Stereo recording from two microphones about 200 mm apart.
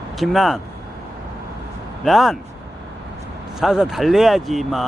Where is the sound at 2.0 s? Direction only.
Centre (ahead or behind).